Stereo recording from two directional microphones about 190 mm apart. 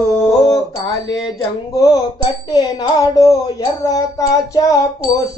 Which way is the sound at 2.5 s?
20° left (ahead or behind).